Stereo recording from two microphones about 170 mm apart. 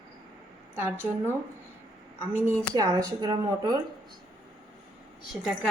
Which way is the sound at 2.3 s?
15° right (ahead or behind).